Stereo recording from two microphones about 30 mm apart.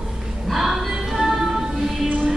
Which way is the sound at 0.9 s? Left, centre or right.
Centre.